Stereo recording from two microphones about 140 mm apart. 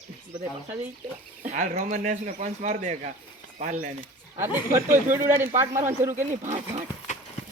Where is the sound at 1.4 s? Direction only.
60° right (ahead or behind).